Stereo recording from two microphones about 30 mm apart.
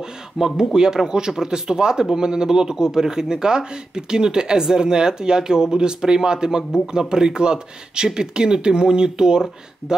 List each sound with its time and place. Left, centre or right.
0.4 s speech: centre
0.7 s speech: right